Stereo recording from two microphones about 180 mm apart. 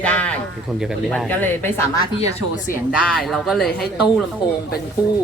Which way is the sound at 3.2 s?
Centre (ahead or behind).